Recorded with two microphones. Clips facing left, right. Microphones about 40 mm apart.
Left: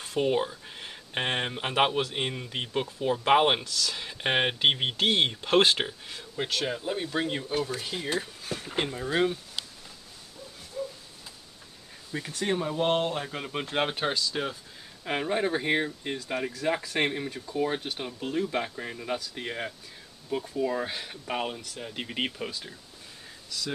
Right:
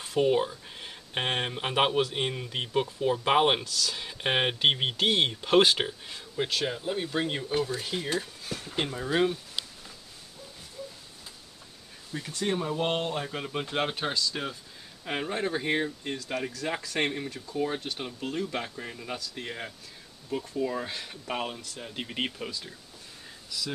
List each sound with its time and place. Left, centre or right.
0.0 s speech: centre
8.8 s speech: centre
10.8 s a sound: centre
12.1 s speech: left
12.4 s speech: centre
17.9 s speech: centre